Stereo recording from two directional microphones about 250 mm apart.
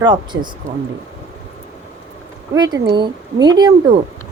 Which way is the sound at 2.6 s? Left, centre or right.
Centre.